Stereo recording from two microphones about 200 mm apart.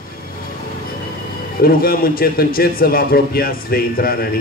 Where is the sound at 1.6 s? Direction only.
45° left (ahead or behind).